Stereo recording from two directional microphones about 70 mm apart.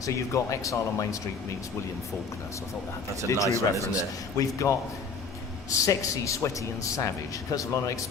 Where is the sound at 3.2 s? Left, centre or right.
Left.